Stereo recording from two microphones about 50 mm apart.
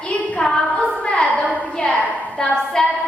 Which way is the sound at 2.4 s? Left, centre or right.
Centre.